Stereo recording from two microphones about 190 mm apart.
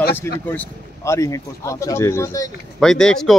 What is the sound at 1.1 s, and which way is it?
Speech, 15° left (ahead or behind).